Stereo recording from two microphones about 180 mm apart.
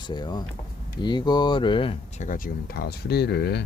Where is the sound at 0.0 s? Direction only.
25° left (ahead or behind).